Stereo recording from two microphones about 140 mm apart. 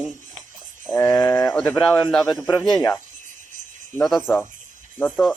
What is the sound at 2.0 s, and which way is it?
Speech, 5° left (ahead or behind).